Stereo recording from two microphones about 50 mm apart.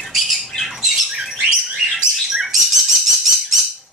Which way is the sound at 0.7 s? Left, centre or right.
Centre.